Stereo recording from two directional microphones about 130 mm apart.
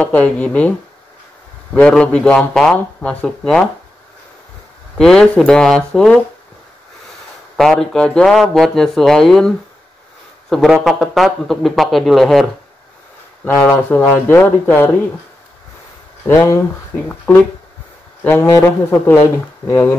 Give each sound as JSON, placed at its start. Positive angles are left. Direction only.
{"t": 0.0, "sound": "speech", "side_deg": 10}
{"t": 4.9, "sound": "a man's voice", "side_deg": 5}
{"t": 7.5, "sound": "a man's voice", "side_deg": 5}
{"t": 10.5, "sound": "a man's voice", "side_deg": 0}
{"t": 13.5, "sound": "speech", "side_deg": 10}
{"t": 16.3, "sound": "speech", "side_deg": 20}
{"t": 16.9, "sound": "speech", "side_deg": 10}